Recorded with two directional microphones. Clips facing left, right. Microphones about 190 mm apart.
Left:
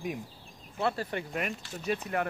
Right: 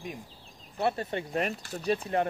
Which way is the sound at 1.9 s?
30° right (ahead or behind).